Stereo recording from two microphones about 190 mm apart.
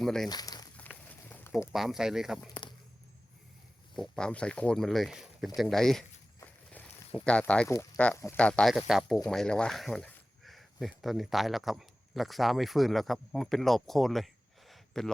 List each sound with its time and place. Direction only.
0.0 s speech: centre (ahead or behind)
0.3 s speech: 20° left (ahead or behind)
0.8 s a sound: 10° left (ahead or behind)
1.7 s speech: centre (ahead or behind)
3.9 s speech: centre (ahead or behind)
14.7 s a sound: centre (ahead or behind)